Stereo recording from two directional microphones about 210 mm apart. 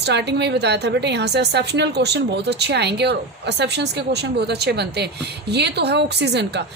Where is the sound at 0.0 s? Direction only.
55° right (ahead or behind).